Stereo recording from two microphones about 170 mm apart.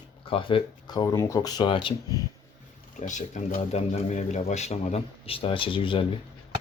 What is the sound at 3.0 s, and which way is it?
Speech, 45° left (ahead or behind).